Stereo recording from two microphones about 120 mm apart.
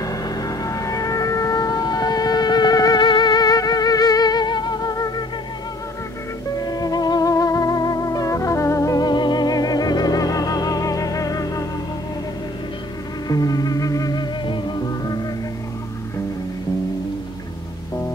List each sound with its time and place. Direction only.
0.0 s a sound: 30° left (ahead or behind)
6.5 s music: 30° left (ahead or behind)
13.3 s music: 30° left (ahead or behind)